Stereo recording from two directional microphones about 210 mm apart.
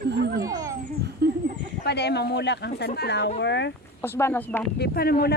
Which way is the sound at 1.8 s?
50° left (ahead or behind).